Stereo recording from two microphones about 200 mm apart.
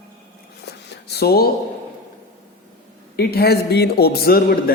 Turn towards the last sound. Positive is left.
turn(degrees=50)  # may be behind; listen again after turning